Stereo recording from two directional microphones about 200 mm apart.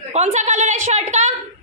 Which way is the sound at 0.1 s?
35° right (ahead or behind).